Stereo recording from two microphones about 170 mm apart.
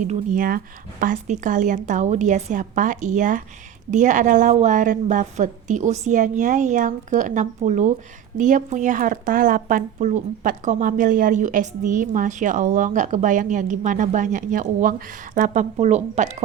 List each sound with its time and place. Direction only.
0.0 s speech: 50° right (ahead or behind)